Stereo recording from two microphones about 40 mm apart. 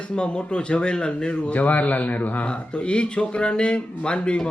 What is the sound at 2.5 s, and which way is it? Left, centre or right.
Speech, left.